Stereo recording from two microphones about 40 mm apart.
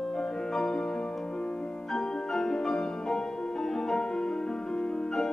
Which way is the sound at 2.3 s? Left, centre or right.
Centre.